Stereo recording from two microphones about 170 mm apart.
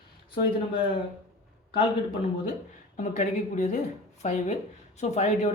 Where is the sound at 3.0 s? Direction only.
45° left (ahead or behind).